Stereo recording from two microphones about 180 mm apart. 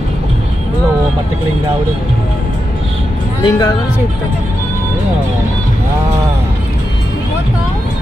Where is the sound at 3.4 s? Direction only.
20° left (ahead or behind).